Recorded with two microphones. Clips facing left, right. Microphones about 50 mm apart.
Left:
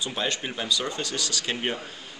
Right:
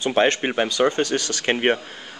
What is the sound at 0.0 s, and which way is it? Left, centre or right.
Speech, right.